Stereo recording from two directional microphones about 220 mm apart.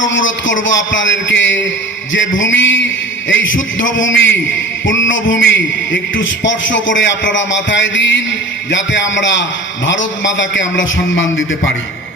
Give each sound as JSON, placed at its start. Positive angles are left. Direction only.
{"t": 0.0, "sound": "a man's voice", "side_deg": 60}